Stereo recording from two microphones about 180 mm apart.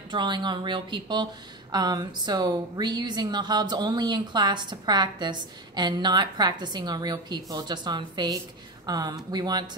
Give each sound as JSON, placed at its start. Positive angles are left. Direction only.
{"t": 0.1, "sound": "speech", "side_deg": -25}